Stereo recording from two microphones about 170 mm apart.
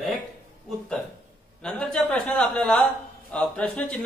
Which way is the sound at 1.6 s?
5° left (ahead or behind).